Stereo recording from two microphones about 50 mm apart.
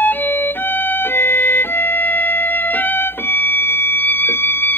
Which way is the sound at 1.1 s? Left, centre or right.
Left.